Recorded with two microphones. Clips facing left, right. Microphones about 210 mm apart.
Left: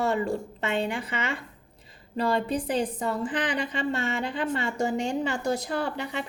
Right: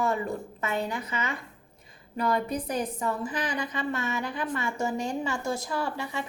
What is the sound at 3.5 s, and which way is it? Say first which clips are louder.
A woman's voice: left 2 dB; 30° left (ahead or behind).